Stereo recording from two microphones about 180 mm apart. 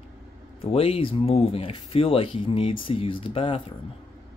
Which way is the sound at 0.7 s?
30° left (ahead or behind).